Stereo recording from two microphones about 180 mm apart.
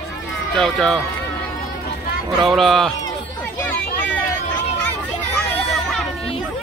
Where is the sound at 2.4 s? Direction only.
Centre (ahead or behind).